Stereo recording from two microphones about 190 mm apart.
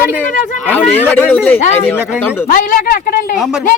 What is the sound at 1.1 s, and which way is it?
Speech, 10° left (ahead or behind).